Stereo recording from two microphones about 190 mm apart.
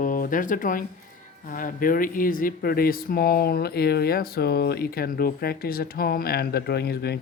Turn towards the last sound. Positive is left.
turn(degrees=60)  # may be behind; listen again after turning